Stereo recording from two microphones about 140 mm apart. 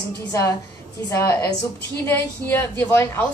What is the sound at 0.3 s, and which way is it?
A woman's voice, 20° left (ahead or behind).